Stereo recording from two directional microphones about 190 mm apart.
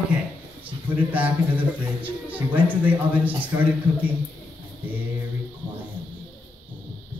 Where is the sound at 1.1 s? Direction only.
10° right (ahead or behind).